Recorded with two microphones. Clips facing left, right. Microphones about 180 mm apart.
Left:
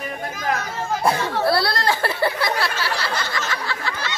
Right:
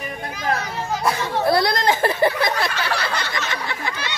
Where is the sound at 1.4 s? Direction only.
20° right (ahead or behind).